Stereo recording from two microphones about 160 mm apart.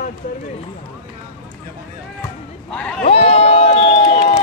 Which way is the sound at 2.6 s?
5° left (ahead or behind).